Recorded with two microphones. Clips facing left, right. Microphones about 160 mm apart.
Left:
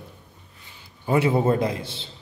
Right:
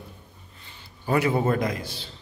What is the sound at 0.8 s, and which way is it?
A man's voice, 25° left (ahead or behind).